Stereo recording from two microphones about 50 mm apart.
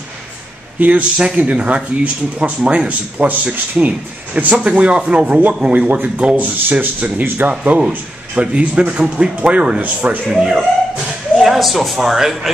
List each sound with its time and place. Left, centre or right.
0.7 s speech: right
9.8 s speech: right
10.2 s speech: centre
11.3 s speech: centre